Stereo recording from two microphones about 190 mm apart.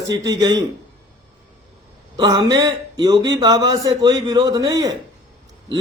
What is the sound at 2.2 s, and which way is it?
A man's voice, 20° right (ahead or behind).